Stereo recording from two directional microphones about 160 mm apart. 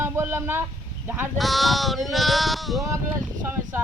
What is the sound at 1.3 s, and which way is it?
Male singing, centre (ahead or behind).